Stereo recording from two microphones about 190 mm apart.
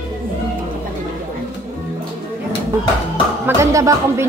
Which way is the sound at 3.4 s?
15° right (ahead or behind).